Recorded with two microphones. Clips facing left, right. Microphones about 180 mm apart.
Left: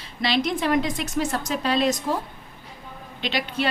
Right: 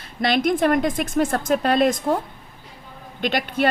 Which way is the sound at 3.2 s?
50° right (ahead or behind).